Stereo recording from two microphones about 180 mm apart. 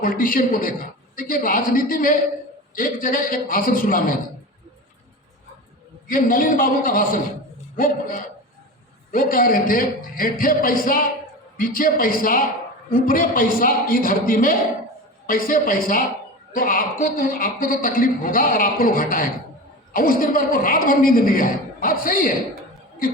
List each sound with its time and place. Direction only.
0.0 s a man's voice: 50° left (ahead or behind)
6.1 s a man's voice: 50° left (ahead or behind)
9.1 s a man's voice: 50° left (ahead or behind)